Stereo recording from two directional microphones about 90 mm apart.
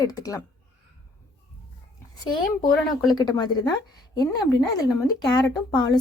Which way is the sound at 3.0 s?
50° left (ahead or behind).